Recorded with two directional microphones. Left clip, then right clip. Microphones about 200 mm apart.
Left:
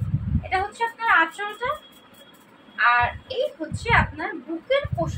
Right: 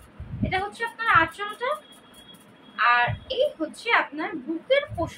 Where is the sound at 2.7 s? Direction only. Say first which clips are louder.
Left 1 dB; 10° right (ahead or behind).